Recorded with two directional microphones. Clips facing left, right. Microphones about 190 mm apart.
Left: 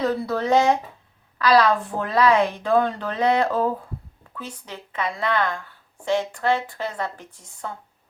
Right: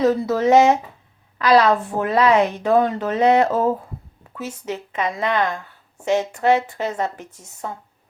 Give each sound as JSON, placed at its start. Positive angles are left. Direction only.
{"t": 0.0, "sound": "a woman's voice", "side_deg": -20}